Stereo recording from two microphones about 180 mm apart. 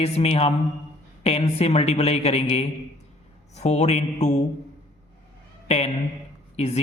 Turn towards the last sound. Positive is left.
turn(degrees=35)  # may be behind; listen again after turning